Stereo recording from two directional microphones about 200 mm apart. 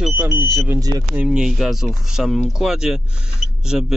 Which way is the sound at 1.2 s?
Centre (ahead or behind).